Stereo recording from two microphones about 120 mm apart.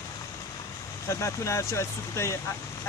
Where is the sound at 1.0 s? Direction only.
25° left (ahead or behind).